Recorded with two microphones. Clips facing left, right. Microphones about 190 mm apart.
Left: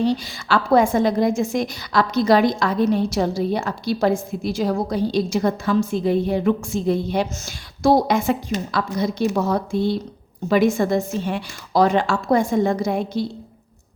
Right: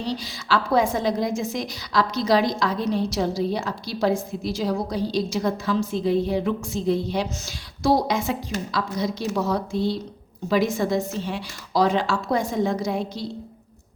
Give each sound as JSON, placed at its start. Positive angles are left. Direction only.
{"t": 0.0, "sound": "a woman's voice", "side_deg": 55}